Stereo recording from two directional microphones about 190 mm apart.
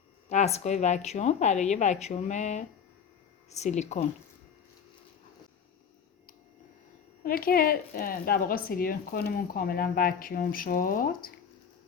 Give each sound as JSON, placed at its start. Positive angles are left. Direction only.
{"t": 0.3, "sound": "speech", "side_deg": 35}
{"t": 7.3, "sound": "speech", "side_deg": 50}